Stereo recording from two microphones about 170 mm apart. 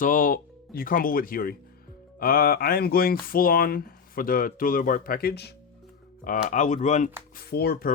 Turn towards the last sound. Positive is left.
turn(degrees=65)  # may be behind; listen again after turning